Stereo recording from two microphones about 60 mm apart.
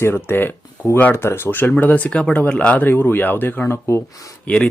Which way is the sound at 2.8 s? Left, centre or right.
Left.